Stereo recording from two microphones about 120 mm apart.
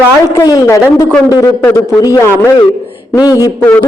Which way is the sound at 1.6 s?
20° left (ahead or behind).